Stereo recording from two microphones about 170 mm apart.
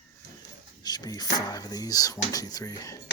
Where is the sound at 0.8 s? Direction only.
25° left (ahead or behind).